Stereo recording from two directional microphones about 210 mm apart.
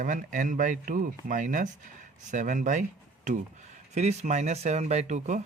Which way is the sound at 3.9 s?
30° right (ahead or behind).